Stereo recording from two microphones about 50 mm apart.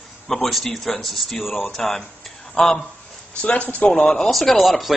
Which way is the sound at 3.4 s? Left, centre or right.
Left.